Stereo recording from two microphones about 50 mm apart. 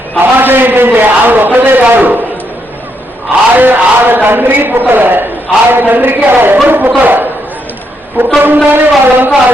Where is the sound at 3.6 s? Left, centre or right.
Right.